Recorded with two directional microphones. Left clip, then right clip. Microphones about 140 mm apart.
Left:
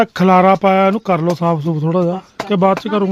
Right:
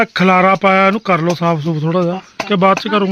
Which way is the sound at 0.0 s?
15° left (ahead or behind).